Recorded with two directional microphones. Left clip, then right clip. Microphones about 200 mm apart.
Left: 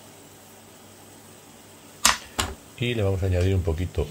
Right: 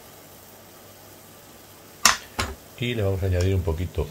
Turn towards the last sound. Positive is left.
turn(degrees=5)  # may be behind; listen again after turning